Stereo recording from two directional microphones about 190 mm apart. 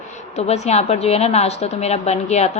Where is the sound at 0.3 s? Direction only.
35° left (ahead or behind).